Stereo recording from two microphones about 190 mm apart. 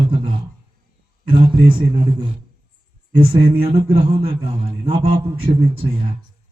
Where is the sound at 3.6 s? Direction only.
30° right (ahead or behind).